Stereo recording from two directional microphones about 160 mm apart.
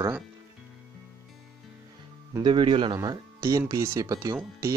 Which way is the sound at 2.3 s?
30° right (ahead or behind).